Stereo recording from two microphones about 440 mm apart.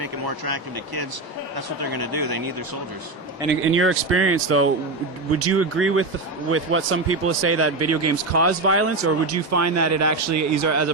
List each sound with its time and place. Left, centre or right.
0.0 s speech: right
3.5 s speech: right